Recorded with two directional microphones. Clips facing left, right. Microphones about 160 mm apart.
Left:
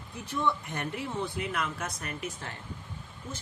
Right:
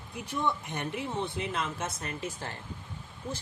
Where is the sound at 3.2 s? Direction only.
60° right (ahead or behind).